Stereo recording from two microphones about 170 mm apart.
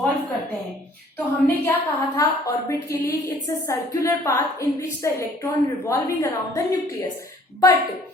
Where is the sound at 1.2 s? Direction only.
10° left (ahead or behind).